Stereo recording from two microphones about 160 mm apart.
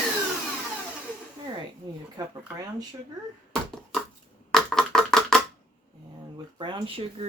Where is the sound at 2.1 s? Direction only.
25° right (ahead or behind).